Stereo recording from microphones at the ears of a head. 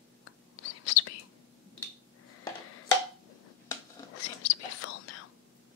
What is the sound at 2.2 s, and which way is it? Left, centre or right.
Finger snapping, left.